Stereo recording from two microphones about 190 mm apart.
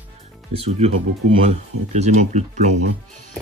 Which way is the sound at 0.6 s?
35° right (ahead or behind).